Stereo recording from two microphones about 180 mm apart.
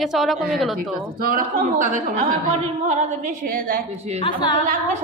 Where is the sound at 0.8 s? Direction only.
50° right (ahead or behind).